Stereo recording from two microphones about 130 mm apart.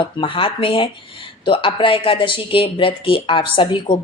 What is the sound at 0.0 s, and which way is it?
A woman's voice, 40° left (ahead or behind).